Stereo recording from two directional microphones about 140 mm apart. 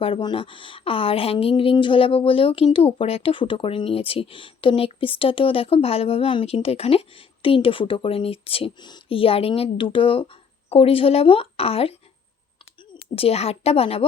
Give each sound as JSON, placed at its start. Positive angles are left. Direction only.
{"t": 0.0, "sound": "a woman's voice", "side_deg": 35}
{"t": 13.1, "sound": "a woman's voice", "side_deg": 45}